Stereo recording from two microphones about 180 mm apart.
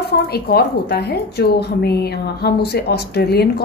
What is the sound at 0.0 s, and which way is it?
A woman's voice, 60° left (ahead or behind).